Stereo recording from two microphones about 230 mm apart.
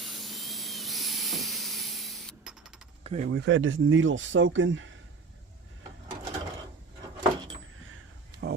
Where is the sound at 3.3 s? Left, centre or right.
Right.